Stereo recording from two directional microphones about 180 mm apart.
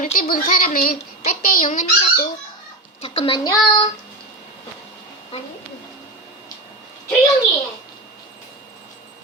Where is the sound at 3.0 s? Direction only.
30° left (ahead or behind).